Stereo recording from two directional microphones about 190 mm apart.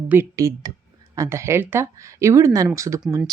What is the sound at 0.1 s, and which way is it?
Speech, 15° right (ahead or behind).